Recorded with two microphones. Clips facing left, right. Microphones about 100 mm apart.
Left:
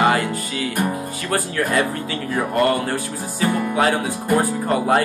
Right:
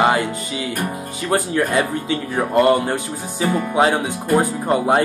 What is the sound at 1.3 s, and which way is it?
Music, 20° right (ahead or behind).